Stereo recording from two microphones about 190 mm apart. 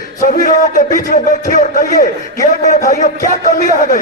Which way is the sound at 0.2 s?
45° left (ahead or behind).